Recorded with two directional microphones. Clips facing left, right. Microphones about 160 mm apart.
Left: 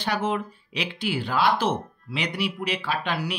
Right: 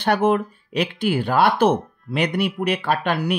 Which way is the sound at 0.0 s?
60° right (ahead or behind).